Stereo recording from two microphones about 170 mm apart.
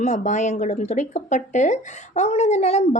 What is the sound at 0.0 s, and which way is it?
A woman's voice, 45° left (ahead or behind).